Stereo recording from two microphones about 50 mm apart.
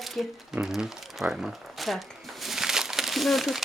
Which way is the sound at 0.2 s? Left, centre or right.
Centre.